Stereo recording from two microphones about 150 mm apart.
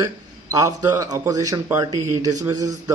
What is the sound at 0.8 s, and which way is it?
Speech, 25° right (ahead or behind).